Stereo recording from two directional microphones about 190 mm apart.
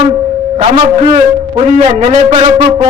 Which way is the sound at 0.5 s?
30° right (ahead or behind).